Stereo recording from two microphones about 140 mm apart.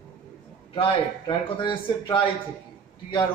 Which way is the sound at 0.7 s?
35° left (ahead or behind).